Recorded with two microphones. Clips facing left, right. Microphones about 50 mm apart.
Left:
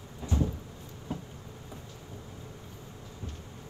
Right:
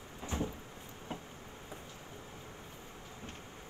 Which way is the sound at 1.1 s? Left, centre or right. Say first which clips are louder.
Left 6 dB; right.